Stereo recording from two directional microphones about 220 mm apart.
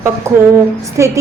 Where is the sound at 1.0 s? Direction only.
15° right (ahead or behind).